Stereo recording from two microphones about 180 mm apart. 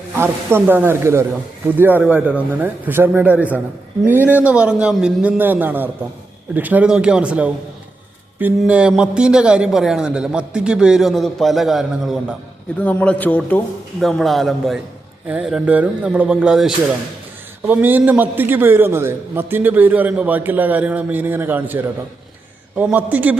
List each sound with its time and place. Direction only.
0.2 s a man's voice: 10° right (ahead or behind)